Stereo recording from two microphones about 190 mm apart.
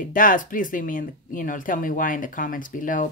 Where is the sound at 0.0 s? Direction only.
45° left (ahead or behind).